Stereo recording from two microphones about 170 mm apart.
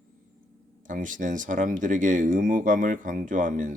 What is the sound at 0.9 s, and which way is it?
Speech, 50° right (ahead or behind).